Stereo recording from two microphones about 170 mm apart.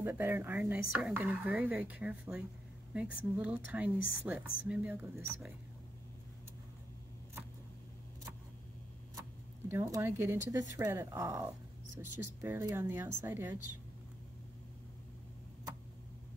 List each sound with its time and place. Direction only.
0.0 s speech: 15° right (ahead or behind)
9.7 s speech: 15° right (ahead or behind)